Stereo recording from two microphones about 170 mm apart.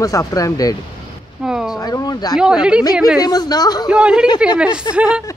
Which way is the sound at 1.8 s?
20° left (ahead or behind).